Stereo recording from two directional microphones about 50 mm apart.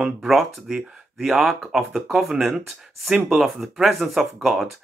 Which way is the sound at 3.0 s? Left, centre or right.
Centre.